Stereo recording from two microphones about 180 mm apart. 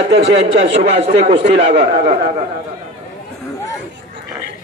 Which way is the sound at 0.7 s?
35° right (ahead or behind).